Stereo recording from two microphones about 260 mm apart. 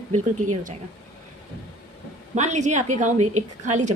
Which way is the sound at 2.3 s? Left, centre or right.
Right.